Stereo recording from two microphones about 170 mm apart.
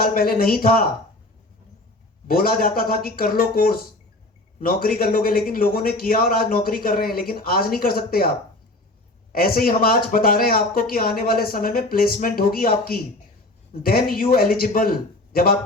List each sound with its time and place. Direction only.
0.0 s a man's voice: 60° left (ahead or behind)
2.2 s a man's voice: 60° left (ahead or behind)
9.3 s a man's voice: 60° left (ahead or behind)